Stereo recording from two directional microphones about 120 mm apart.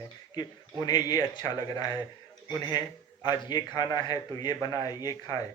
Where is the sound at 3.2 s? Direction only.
40° left (ahead or behind).